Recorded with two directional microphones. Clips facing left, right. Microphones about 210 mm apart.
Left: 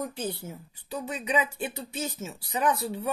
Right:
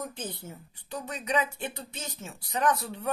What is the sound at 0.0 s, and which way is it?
A woman's voice, 10° left (ahead or behind).